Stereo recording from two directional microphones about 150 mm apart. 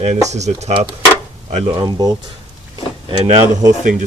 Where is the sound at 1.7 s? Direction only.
30° right (ahead or behind).